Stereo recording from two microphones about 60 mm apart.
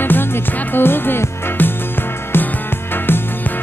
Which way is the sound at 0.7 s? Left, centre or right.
Left.